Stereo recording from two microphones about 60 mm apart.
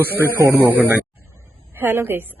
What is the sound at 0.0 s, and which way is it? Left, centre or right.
Speech, right.